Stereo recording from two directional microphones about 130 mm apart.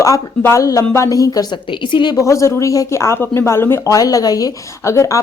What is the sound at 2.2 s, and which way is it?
Speech, 25° left (ahead or behind).